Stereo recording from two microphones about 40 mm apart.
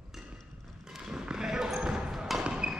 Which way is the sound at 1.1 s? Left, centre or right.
Centre.